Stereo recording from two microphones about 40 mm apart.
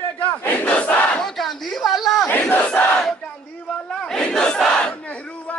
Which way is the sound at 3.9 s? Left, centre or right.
Left.